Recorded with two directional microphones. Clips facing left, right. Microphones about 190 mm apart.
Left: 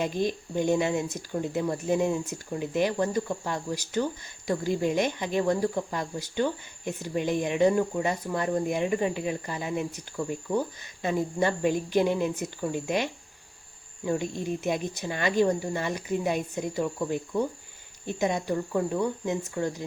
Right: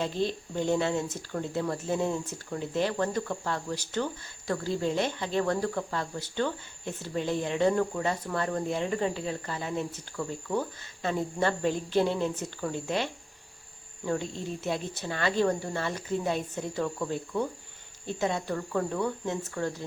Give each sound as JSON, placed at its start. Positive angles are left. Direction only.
{"t": 0.0, "sound": "speech", "side_deg": 15}